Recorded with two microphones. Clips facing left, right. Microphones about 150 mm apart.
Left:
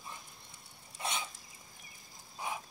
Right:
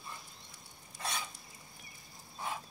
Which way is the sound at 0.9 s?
20° left (ahead or behind).